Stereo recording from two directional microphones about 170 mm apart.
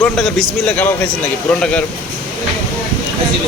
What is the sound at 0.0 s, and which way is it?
Speech, 5° left (ahead or behind).